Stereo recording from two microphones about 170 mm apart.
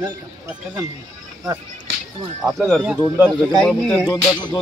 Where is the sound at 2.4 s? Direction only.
Centre (ahead or behind).